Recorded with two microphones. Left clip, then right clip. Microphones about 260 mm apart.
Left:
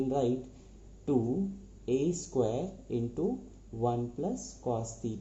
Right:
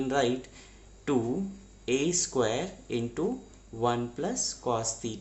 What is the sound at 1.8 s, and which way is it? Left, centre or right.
Speech, right.